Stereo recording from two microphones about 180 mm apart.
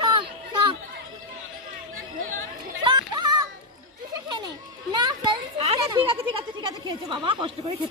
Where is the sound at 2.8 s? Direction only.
25° right (ahead or behind).